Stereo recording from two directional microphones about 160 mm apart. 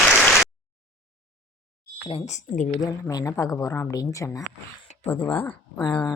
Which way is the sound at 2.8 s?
20° left (ahead or behind).